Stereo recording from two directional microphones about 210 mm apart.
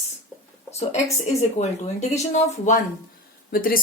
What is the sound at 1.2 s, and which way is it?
Speech, 30° left (ahead or behind).